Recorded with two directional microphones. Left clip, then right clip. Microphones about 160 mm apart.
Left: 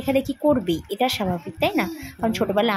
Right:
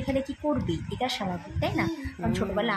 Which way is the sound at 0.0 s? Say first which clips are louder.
Left 8 dB; 40° left (ahead or behind).